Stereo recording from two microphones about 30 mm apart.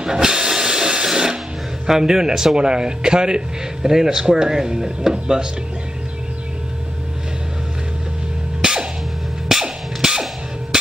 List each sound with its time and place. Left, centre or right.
0.0 s hiss: right
1.0 s a sound: right
1.9 s a man's voice: centre
8.5 s music: right
9.5 s cap gun: centre